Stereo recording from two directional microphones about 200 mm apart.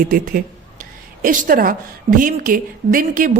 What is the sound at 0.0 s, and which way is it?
A woman's voice, 45° right (ahead or behind).